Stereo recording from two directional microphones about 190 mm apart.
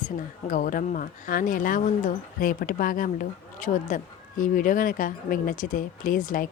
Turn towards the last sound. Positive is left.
turn(degrees=45)  # may be behind; listen again after turning